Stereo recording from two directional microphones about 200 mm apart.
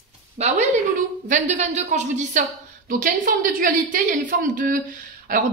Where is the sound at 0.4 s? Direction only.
30° right (ahead or behind).